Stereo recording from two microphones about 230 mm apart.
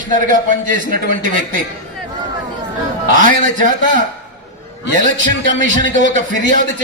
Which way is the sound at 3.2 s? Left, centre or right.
Right.